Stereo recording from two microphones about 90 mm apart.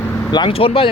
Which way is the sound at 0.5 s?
85° left.